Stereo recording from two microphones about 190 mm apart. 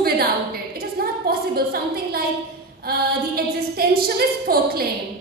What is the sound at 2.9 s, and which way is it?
A woman's voice, 55° right (ahead or behind).